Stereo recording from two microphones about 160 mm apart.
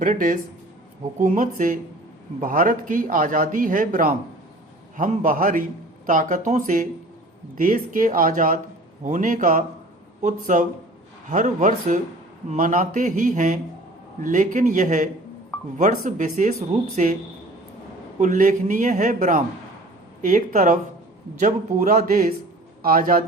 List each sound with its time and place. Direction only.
0.0 s a man's voice: 55° right (ahead or behind)
18.2 s a man's voice: 55° right (ahead or behind)